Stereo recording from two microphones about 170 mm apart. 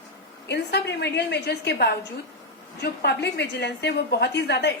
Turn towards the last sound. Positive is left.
turn(degrees=85)